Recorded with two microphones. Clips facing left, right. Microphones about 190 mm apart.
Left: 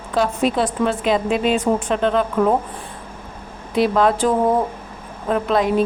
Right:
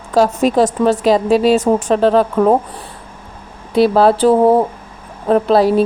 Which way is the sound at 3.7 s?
35° right (ahead or behind).